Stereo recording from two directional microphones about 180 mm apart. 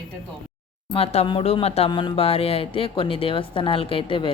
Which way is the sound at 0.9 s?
35° left (ahead or behind).